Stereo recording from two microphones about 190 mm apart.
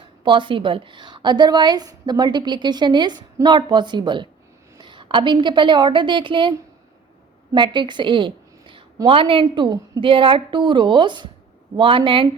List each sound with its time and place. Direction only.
0.3 s a woman's voice: 25° right (ahead or behind)
7.5 s a woman's voice: 25° right (ahead or behind)